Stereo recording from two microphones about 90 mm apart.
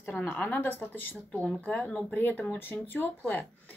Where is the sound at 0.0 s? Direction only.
20° left (ahead or behind).